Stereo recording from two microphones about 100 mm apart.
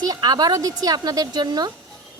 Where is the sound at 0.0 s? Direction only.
40° right (ahead or behind).